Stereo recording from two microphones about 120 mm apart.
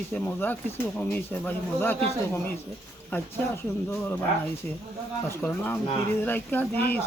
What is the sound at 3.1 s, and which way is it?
Speech, 15° left (ahead or behind).